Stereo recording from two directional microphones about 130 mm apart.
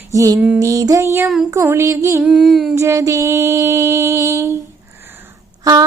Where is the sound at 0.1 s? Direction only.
25° right (ahead or behind).